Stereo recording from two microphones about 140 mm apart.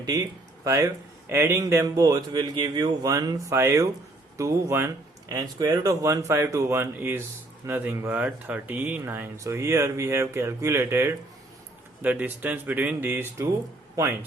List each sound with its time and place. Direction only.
0.0 s a man's voice: 25° right (ahead or behind)